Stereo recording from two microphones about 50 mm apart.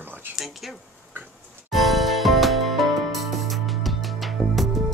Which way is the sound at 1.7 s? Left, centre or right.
Centre.